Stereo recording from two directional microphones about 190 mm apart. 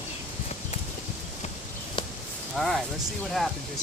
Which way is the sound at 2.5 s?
Centre (ahead or behind).